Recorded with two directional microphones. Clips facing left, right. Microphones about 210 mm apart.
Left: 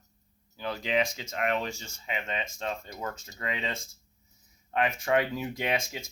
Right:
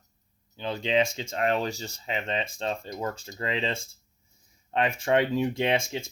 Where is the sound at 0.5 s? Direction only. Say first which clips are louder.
Right 3 dB; 25° right (ahead or behind).